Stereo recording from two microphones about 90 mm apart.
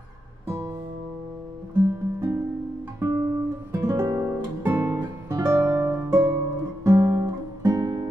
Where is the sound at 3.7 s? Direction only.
35° right (ahead or behind).